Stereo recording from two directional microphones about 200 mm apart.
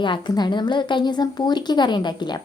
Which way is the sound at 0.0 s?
20° left (ahead or behind).